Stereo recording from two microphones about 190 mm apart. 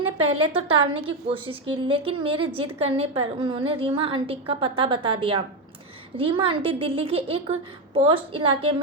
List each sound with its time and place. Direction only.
0.3 s a woman's voice: 30° right (ahead or behind)